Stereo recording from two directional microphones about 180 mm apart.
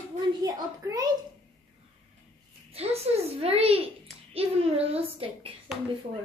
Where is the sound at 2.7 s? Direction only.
35° right (ahead or behind).